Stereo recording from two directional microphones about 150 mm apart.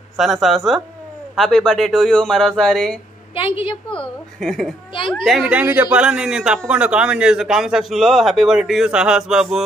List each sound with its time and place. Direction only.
0.2 s a man's voice: centre (ahead or behind)
3.3 s a woman's voice: 35° left (ahead or behind)
4.4 s a man's voice: centre (ahead or behind)